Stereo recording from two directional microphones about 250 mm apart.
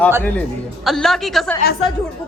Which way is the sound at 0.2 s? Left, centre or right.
Centre.